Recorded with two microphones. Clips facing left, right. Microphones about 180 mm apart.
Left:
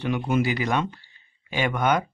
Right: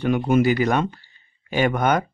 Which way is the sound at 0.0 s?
50° right (ahead or behind).